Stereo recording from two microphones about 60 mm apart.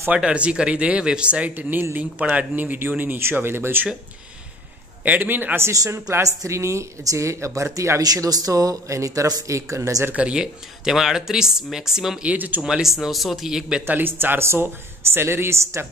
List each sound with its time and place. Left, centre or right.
0.1 s speech: centre
1.5 s speech: right
5.0 s speech: right
5.7 s speech: right
8.0 s speech: right
10.1 s speech: centre
12.2 s speech: right
12.6 s speech: centre
13.8 s speech: right